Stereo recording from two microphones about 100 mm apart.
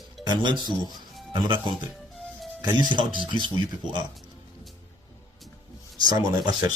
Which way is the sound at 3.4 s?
50° right (ahead or behind).